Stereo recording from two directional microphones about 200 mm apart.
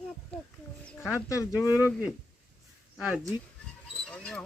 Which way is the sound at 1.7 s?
10° right (ahead or behind).